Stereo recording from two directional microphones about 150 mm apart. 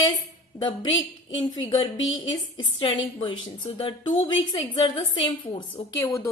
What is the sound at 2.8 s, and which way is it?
Speech, 35° left (ahead or behind).